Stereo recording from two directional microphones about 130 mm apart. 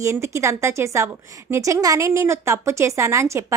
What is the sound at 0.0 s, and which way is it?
A woman's voice, 20° right (ahead or behind).